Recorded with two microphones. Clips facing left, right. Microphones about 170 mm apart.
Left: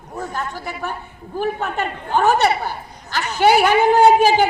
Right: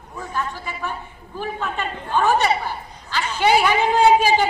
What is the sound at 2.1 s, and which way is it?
Speech, 40° left (ahead or behind).